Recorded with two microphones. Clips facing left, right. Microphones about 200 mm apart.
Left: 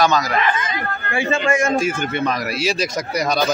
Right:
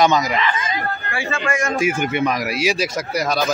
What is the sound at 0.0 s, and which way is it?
Speech, 20° right (ahead or behind).